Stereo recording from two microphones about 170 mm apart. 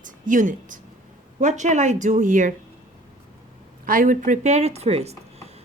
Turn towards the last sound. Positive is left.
turn(degrees=-40)  # may be behind; listen again after turning